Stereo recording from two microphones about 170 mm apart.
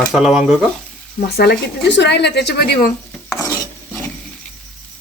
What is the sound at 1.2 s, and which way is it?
Speech, 70° left (ahead or behind).